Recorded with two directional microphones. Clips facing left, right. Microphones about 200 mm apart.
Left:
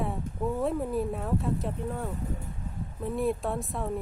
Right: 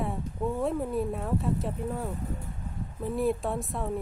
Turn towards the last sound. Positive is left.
turn(degrees=0)  # may be behind; listen again after turning